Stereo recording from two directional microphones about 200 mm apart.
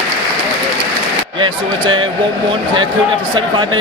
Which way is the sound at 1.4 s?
25° right (ahead or behind).